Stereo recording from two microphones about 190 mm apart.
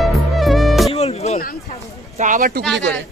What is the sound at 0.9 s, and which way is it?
Music, 35° left (ahead or behind).